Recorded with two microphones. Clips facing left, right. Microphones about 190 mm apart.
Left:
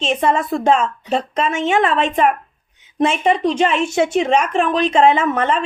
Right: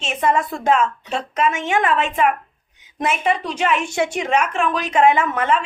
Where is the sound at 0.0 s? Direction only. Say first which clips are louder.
Left 2 dB; 30° left (ahead or behind).